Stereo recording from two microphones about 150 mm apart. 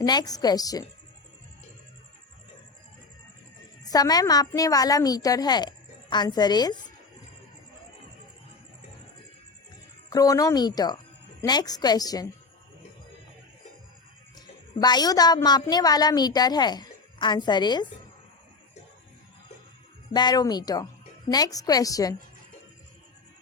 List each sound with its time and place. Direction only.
0.0 s a woman's voice: 25° left (ahead or behind)
3.8 s a woman's voice: 25° left (ahead or behind)
10.1 s a woman's voice: 25° left (ahead or behind)
14.3 s a woman's voice: 25° left (ahead or behind)
20.1 s a woman's voice: 25° left (ahead or behind)